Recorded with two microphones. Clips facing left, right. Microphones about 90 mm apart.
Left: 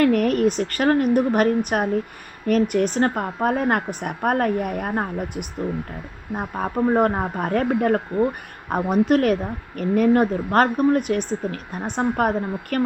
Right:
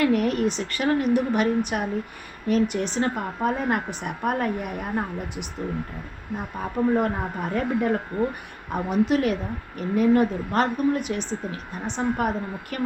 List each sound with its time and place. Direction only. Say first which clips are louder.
0.0 s a woman's voice: left 4 dB; 50° left (ahead or behind)